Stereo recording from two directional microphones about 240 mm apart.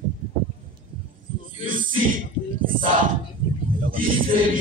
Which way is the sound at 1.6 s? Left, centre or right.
Right.